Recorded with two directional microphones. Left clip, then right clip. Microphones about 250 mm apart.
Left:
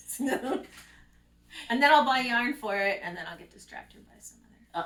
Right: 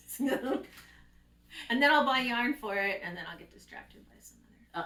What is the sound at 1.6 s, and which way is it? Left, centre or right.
Speech, centre.